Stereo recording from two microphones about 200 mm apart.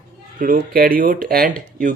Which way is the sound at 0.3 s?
45° right (ahead or behind).